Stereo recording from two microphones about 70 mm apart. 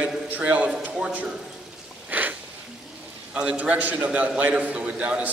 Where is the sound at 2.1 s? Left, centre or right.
Right.